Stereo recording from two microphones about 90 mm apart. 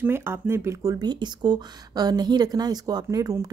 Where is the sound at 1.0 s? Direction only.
50° right (ahead or behind).